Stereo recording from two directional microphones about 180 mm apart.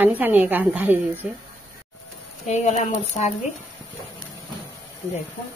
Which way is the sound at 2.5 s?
40° left (ahead or behind).